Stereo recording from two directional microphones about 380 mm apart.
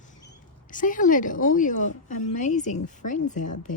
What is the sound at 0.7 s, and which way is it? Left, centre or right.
A woman's voice, left.